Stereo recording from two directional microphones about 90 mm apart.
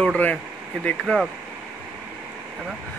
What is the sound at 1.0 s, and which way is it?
Speech, centre (ahead or behind).